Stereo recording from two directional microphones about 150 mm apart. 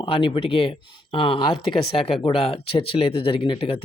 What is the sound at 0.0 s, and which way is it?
Speech, 35° left (ahead or behind).